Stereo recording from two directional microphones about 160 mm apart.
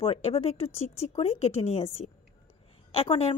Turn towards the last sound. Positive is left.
turn(degrees=35)  # may be behind; listen again after turning